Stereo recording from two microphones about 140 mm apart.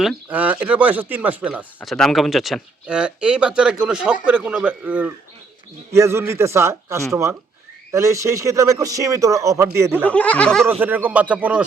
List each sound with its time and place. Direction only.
0.3 s a man's voice: 10° right (ahead or behind)
10.1 s speech: 10° left (ahead or behind)
10.7 s speech: 15° right (ahead or behind)